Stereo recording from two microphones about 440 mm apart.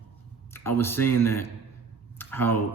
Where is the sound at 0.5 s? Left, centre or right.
Centre.